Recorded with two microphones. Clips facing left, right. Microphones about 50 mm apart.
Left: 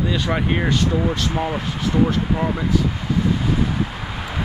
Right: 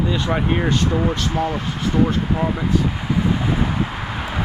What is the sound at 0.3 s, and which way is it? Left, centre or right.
Speech, centre.